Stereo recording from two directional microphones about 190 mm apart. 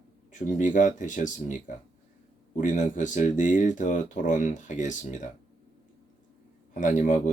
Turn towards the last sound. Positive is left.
turn(degrees=40)  # may be behind; listen again after turning